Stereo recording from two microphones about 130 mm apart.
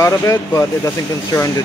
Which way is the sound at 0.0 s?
20° left (ahead or behind).